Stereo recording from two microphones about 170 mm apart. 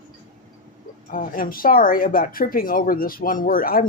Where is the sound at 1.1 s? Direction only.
55° left (ahead or behind).